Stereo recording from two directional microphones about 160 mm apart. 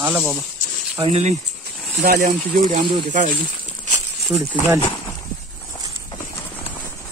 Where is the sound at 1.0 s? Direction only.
40° right (ahead or behind).